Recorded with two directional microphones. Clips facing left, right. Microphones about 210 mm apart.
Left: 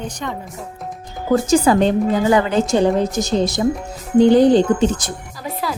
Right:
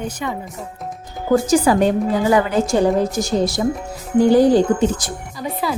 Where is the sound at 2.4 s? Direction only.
20° left (ahead or behind).